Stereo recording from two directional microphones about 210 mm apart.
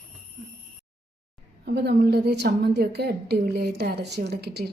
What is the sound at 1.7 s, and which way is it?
A woman's voice, 50° right (ahead or behind).